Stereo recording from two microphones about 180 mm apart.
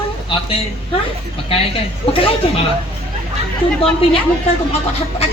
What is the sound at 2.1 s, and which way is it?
Speech, 30° left (ahead or behind).